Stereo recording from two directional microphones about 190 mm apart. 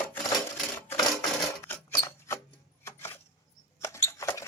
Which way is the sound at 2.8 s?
10° left (ahead or behind).